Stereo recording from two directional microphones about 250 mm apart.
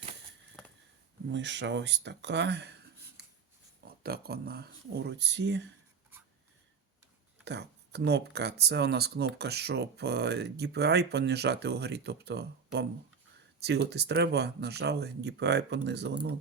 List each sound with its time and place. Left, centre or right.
1.3 s speech: right
3.8 s speech: right
7.4 s speech: right